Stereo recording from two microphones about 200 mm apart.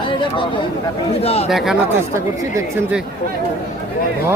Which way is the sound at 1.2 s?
30° left (ahead or behind).